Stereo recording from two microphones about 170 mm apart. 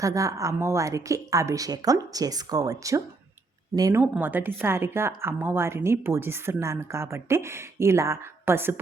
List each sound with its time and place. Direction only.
0.0 s a woman's voice: 20° right (ahead or behind)